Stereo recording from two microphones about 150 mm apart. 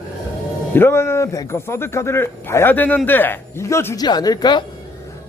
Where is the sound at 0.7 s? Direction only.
15° left (ahead or behind).